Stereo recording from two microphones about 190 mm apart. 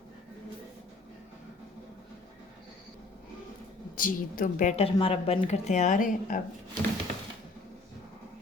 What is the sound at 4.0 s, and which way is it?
A woman's voice, 45° left (ahead or behind).